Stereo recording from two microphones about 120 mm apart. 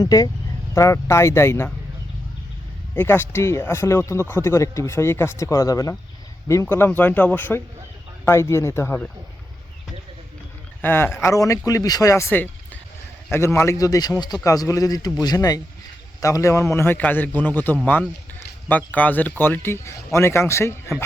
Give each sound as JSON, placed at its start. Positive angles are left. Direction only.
{"t": 0.0, "sound": "speech", "side_deg": 30}
{"t": 2.9, "sound": "speech", "side_deg": 15}
{"t": 10.8, "sound": "a man's voice", "side_deg": 20}
{"t": 18.9, "sound": "speech", "side_deg": 15}